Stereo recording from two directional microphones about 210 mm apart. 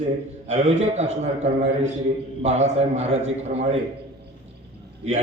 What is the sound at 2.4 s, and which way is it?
Speech, 30° right (ahead or behind).